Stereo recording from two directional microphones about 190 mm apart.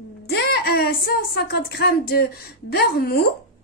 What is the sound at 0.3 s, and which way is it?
A woman's voice, 60° left (ahead or behind).